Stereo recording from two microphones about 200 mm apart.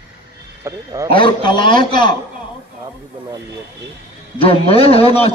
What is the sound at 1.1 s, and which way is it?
A man's voice, 25° left (ahead or behind).